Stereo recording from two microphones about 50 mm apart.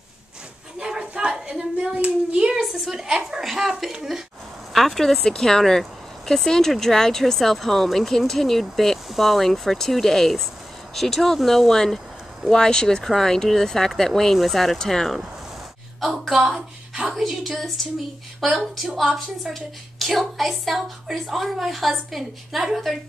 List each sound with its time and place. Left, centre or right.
0.7 s a sound: centre
2.0 s hands: right
2.5 s speech: centre
4.7 s speech: centre
16.0 s a woman's voice: centre